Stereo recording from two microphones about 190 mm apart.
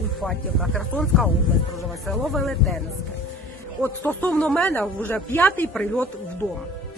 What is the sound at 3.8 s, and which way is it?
Speech, 10° left (ahead or behind).